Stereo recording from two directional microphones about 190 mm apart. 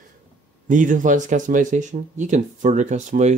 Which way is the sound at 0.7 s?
45° right (ahead or behind).